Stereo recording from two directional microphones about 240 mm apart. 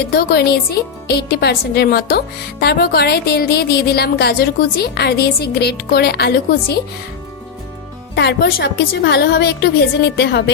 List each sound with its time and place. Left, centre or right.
0.1 s speech: left
8.1 s a woman's voice: left